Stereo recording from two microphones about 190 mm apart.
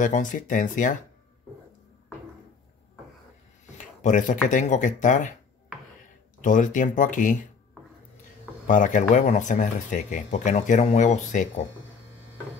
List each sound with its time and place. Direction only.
0.0 s speech: 40° left (ahead or behind)
3.7 s speech: 40° left (ahead or behind)
6.4 s speech: 40° left (ahead or behind)
8.6 s speech: 45° left (ahead or behind)